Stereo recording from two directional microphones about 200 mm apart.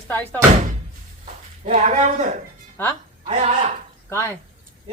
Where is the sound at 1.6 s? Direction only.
35° right (ahead or behind).